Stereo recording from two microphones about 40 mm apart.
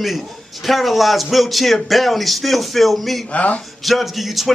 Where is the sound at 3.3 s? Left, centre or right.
Left.